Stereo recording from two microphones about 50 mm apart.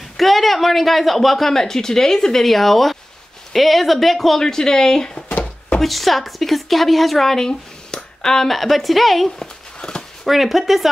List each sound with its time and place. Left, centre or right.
0.2 s speech: centre
5.8 s speech: centre
9.8 s a sound: centre
10.2 s speech: centre